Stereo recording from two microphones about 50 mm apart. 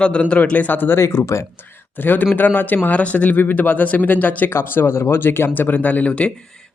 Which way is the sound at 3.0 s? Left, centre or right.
Left.